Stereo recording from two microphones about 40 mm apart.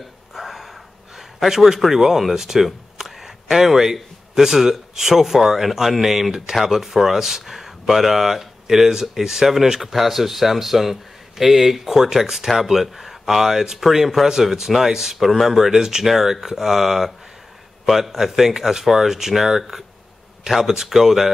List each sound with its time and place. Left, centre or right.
0.3 s speech: centre